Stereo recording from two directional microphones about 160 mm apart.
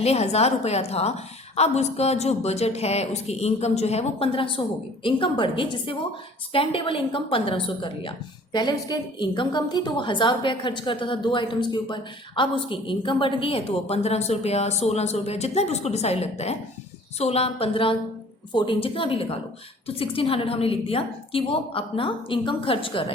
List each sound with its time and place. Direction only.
0.0 s a woman's voice: 40° left (ahead or behind)